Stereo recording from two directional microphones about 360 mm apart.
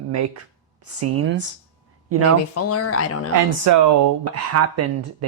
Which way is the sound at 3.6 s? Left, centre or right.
Right.